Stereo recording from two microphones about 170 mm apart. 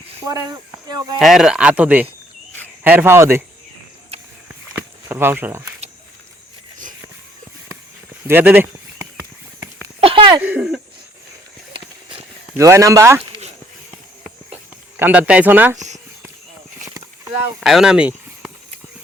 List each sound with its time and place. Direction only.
0.9 s speech: 25° right (ahead or behind)
1.2 s speech: centre (ahead or behind)
5.0 s speech: 15° right (ahead or behind)
8.3 s a sound: 10° right (ahead or behind)
10.0 s a sound: 30° right (ahead or behind)
10.4 s speech: 5° right (ahead or behind)
11.7 s a sound: 30° right (ahead or behind)
12.5 s speech: 20° right (ahead or behind)
14.9 s speech: 10° right (ahead or behind)
17.6 s speech: centre (ahead or behind)